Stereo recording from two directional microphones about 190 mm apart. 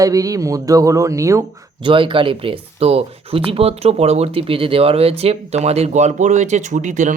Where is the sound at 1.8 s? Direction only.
25° right (ahead or behind).